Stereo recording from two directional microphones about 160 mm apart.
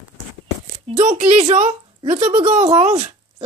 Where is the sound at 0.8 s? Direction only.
40° right (ahead or behind).